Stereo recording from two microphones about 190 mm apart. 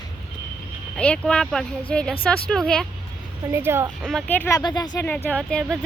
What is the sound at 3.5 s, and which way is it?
Speech, 10° right (ahead or behind).